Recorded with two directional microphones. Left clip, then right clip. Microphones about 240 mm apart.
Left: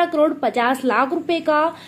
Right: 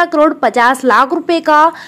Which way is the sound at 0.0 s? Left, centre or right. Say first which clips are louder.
Right 7 dB; right.